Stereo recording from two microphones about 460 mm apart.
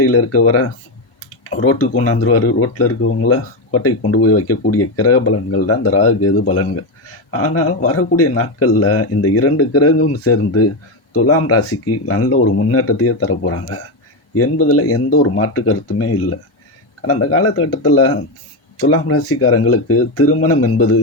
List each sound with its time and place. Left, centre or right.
0.0 s speech: left